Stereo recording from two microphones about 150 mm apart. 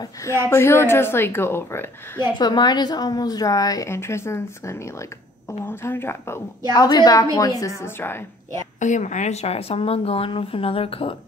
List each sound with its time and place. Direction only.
0.0 s a woman's voice: 20° left (ahead or behind)
2.3 s a woman's voice: 30° left (ahead or behind)
6.7 s a woman's voice: 30° left (ahead or behind)
8.7 s speech: 55° left (ahead or behind); by 11.1 s 40° left (ahead or behind)